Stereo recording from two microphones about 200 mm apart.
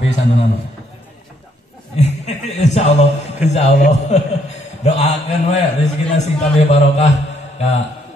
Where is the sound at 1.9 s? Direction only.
35° left (ahead or behind).